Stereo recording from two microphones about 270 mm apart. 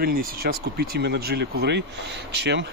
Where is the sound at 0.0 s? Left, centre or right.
Right.